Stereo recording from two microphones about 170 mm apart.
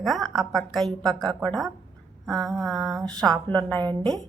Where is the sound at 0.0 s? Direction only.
Centre (ahead or behind).